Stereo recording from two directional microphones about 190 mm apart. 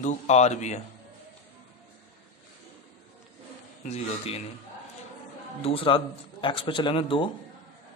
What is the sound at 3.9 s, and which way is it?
Speech, 35° left (ahead or behind).